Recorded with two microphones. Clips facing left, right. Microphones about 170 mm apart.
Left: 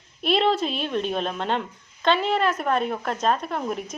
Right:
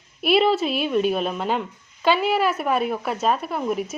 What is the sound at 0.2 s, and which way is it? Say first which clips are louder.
A woman's voice: right 3 dB; 5° right (ahead or behind).